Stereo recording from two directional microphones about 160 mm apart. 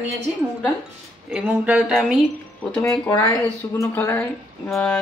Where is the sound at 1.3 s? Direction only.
10° right (ahead or behind).